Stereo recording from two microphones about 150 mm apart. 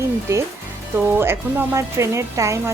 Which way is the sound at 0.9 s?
15° right (ahead or behind).